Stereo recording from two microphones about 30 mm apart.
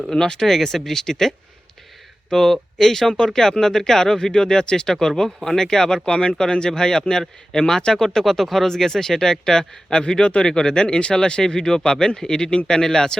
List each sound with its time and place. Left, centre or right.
0.1 s speech: centre
2.3 s a man's voice: centre
6.1 s a man's voice: left
8.2 s speech: centre
8.7 s a man's voice: centre
10.1 s a man's voice: left